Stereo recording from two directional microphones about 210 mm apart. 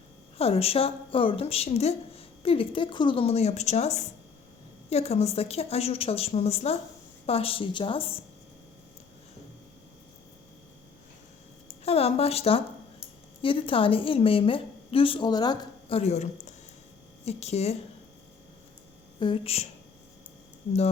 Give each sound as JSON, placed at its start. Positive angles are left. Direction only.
{"t": 0.3, "sound": "speech", "side_deg": 30}
{"t": 11.9, "sound": "speech", "side_deg": 30}
{"t": 19.2, "sound": "speech", "side_deg": 25}